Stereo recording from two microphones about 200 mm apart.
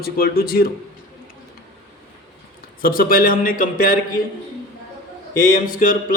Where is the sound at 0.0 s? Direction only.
50° left (ahead or behind).